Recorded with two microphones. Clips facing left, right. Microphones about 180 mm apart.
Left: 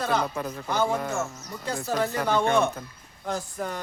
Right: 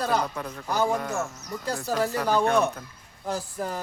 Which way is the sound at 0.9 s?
Centre (ahead or behind).